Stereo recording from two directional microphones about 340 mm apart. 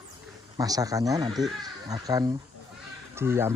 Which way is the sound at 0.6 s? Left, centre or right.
Centre.